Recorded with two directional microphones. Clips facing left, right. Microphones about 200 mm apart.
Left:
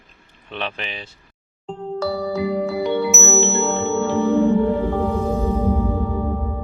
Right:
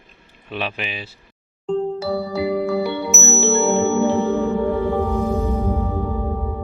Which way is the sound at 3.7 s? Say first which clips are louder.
Right 3 dB; 15° right (ahead or behind).